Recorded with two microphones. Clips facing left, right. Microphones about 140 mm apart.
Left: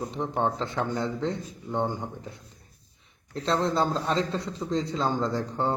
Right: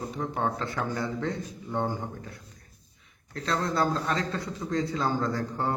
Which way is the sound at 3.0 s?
30° left (ahead or behind).